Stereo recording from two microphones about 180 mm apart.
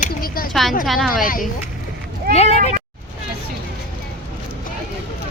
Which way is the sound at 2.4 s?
35° left (ahead or behind).